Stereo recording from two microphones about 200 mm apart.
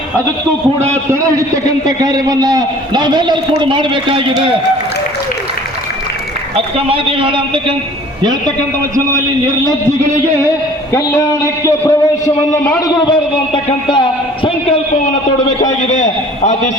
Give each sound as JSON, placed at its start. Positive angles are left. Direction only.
{"t": 1.1, "sound": "a man's voice", "side_deg": -15}
{"t": 6.7, "sound": "a man's voice", "side_deg": -25}
{"t": 10.9, "sound": "a man's voice", "side_deg": 15}
{"t": 13.1, "sound": "a man's voice", "side_deg": 25}
{"t": 15.9, "sound": "a man's voice", "side_deg": 35}